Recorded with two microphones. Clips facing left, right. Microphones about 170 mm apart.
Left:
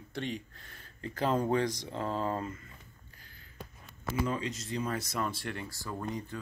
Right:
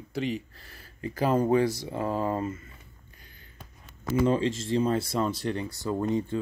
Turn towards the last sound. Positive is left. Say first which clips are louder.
# right 10 dB
turn(degrees=-25)  # may be behind; listen again after turning